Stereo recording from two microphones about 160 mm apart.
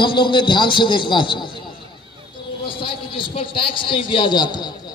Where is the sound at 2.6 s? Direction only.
35° left (ahead or behind).